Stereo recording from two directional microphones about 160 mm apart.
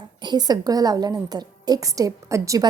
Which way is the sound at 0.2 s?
25° right (ahead or behind).